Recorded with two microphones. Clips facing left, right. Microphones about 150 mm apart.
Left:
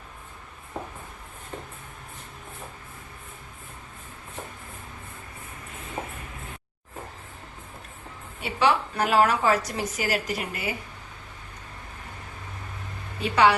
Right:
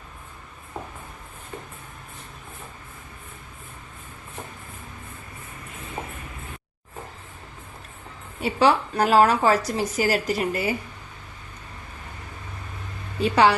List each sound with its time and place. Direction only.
8.4 s a woman's voice: 40° right (ahead or behind)
13.2 s a woman's voice: 35° right (ahead or behind)